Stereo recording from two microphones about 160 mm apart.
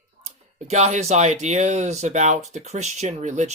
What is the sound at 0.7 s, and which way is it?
Speech, 45° right (ahead or behind).